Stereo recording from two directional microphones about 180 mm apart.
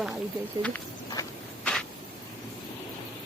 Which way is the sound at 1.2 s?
15° left (ahead or behind).